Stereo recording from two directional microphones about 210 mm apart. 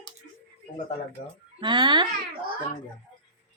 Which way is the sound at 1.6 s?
20° right (ahead or behind).